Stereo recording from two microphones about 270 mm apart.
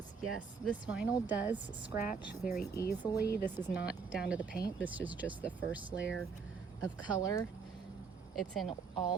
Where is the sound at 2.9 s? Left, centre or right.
Left.